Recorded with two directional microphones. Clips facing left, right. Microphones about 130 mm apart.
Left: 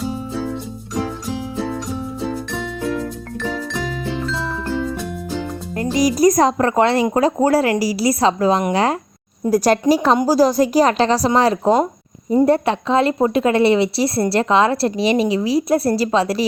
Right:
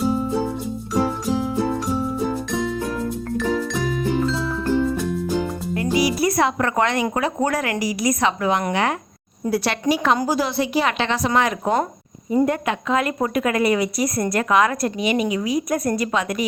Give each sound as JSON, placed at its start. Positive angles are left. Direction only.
{"t": 5.7, "sound": "a woman's voice", "side_deg": 40}